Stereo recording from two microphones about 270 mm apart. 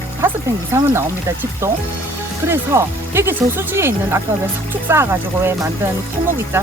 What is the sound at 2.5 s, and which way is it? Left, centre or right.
Speech, centre.